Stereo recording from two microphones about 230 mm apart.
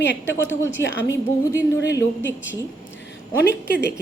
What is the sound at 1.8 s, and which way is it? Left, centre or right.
Speech, left.